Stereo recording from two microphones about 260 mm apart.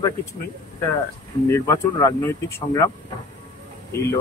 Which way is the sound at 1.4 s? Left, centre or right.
Centre.